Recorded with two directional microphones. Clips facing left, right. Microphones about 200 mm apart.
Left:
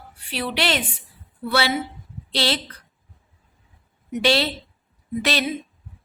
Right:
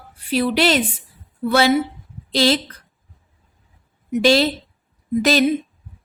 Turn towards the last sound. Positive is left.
turn(degrees=-45)  # may be behind; listen again after turning